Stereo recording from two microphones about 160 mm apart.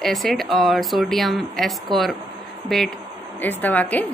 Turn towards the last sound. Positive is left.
turn(degrees=10)  # may be behind; listen again after turning